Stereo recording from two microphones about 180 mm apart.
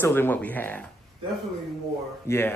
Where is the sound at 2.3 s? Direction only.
15° left (ahead or behind).